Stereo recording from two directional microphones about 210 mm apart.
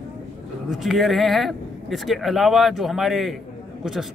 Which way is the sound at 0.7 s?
Centre (ahead or behind).